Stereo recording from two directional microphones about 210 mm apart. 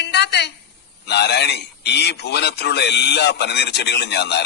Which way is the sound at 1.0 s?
55° left (ahead or behind).